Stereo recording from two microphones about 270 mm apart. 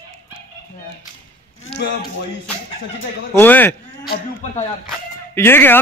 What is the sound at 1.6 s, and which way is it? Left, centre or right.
Speech, left.